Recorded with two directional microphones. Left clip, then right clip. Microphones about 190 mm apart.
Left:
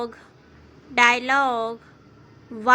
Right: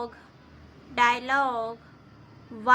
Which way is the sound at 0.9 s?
25° left (ahead or behind).